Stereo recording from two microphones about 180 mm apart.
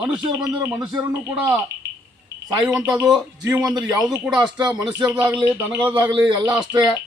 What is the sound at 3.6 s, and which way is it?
Speech, 20° right (ahead or behind).